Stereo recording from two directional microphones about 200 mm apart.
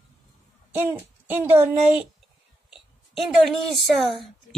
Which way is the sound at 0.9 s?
10° right (ahead or behind).